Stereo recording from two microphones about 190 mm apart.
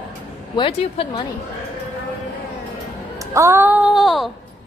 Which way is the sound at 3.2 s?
15° right (ahead or behind).